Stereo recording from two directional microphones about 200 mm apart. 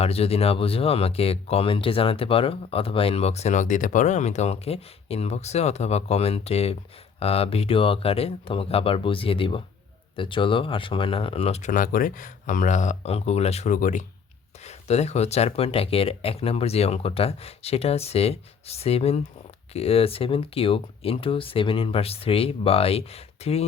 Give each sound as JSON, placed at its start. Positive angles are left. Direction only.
{"t": 0.0, "sound": "speech", "side_deg": 30}
{"t": 11.7, "sound": "speech", "side_deg": 45}